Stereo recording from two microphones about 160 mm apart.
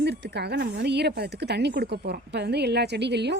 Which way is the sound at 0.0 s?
90° right.